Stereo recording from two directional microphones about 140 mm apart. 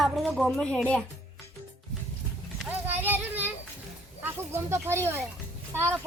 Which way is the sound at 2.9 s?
15° right (ahead or behind).